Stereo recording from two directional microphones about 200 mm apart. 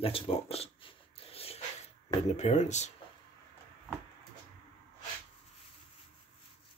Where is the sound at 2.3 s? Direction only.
35° left (ahead or behind).